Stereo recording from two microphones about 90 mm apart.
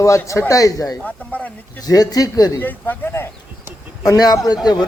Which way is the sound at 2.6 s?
25° left (ahead or behind).